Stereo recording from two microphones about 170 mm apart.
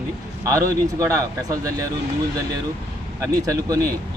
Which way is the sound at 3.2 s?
20° right (ahead or behind).